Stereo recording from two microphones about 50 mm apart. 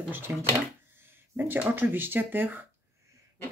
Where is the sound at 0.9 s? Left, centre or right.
Right.